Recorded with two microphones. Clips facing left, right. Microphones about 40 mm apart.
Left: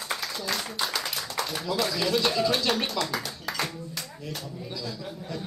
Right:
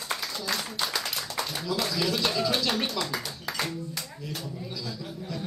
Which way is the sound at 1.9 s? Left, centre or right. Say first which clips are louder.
Left 2 dB; centre.